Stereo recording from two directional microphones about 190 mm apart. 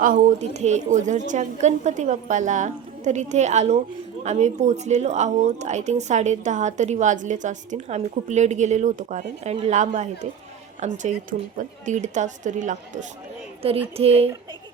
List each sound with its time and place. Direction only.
0.0 s speech: 45° right (ahead or behind)